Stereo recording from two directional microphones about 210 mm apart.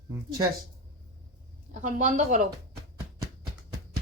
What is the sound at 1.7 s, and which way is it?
Speech, 35° right (ahead or behind).